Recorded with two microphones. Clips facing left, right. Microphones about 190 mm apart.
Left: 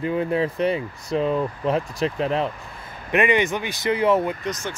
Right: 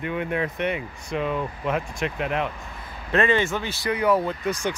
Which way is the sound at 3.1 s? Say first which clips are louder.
Left 2 dB; 15° left (ahead or behind).